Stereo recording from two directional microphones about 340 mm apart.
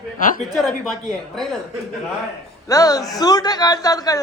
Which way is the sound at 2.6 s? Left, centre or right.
Centre.